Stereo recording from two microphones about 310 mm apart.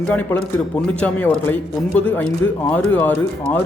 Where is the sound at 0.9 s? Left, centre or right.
Centre.